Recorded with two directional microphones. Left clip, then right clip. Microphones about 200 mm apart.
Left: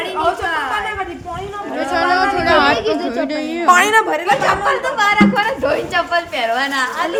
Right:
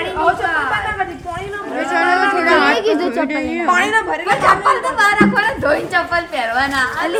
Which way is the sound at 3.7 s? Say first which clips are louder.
Left 4 dB; 55° left (ahead or behind).